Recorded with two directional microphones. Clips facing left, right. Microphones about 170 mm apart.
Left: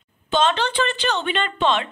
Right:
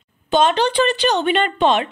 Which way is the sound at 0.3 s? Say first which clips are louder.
Right 4 dB; 15° right (ahead or behind).